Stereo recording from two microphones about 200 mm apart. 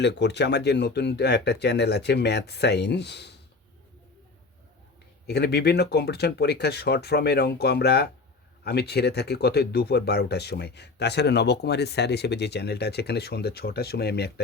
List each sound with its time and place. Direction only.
0.0 s speech: 60° left (ahead or behind)
5.2 s speech: 55° left (ahead or behind)